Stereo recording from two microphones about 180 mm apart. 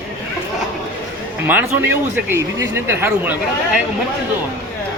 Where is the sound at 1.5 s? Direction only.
10° right (ahead or behind).